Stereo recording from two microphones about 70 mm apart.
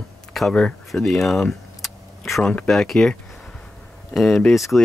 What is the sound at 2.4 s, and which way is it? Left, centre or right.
Speech, centre.